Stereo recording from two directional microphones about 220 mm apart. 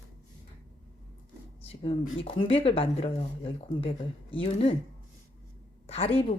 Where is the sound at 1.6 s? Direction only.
25° left (ahead or behind).